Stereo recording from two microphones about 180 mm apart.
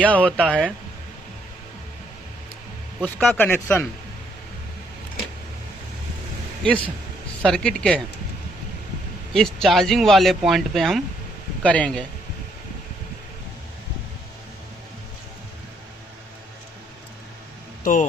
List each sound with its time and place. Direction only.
0.0 s speech: 5° left (ahead or behind)
3.0 s speech: 10° left (ahead or behind)
7.4 s speech: 5° left (ahead or behind)
9.3 s speech: centre (ahead or behind)
17.9 s speech: 45° left (ahead or behind)